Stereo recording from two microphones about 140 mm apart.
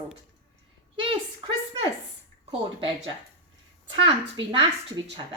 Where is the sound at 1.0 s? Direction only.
40° right (ahead or behind).